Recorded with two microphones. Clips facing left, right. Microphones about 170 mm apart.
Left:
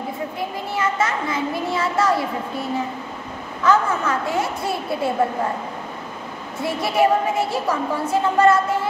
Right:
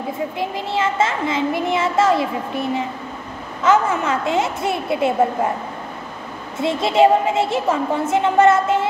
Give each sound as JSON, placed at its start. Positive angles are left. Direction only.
{"t": 0.4, "sound": "a child's voice", "side_deg": -25}
{"t": 3.6, "sound": "a child's voice", "side_deg": -20}
{"t": 6.6, "sound": "a child's voice", "side_deg": -25}